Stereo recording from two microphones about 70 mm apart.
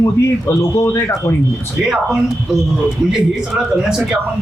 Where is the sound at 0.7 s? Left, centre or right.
Left.